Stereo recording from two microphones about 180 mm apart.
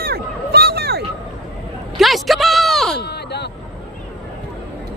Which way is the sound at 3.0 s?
65° left (ahead or behind).